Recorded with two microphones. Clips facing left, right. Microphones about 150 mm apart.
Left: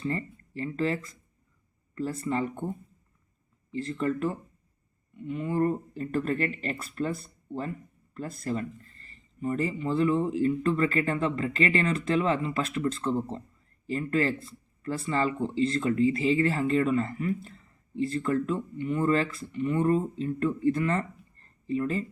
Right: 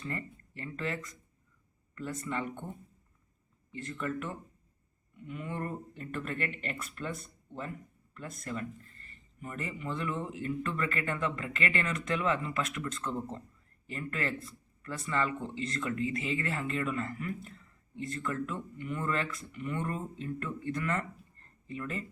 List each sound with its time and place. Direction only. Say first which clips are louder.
0.0 s speech: left 7 dB; 35° left (ahead or behind)
3.7 s speech: left 7 dB; 30° left (ahead or behind)